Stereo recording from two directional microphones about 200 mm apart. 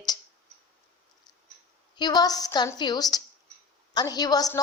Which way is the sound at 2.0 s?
20° left (ahead or behind).